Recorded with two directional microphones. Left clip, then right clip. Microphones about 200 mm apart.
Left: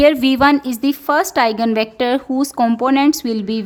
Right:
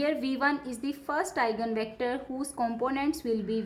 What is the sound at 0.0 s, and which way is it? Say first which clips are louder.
A woman's voice: left 16 dB; 50° left (ahead or behind).